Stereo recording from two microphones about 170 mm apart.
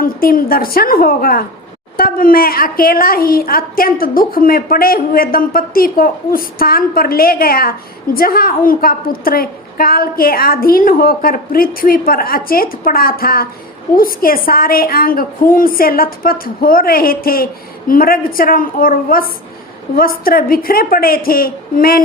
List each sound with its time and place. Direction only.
0.0 s a woman's voice: 60° left (ahead or behind)